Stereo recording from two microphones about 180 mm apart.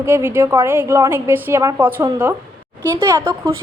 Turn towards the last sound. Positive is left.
turn(degrees=-15)  # may be behind; listen again after turning